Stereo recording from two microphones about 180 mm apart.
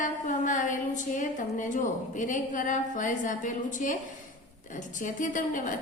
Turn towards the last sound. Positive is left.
turn(degrees=45)  # may be behind; listen again after turning